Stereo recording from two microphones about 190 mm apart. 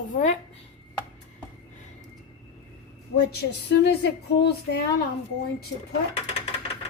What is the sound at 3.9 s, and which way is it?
Speech, 60° left (ahead or behind).